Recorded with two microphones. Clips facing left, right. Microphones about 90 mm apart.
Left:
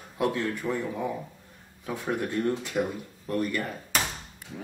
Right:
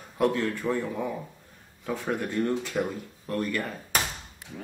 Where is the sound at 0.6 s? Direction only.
25° right (ahead or behind).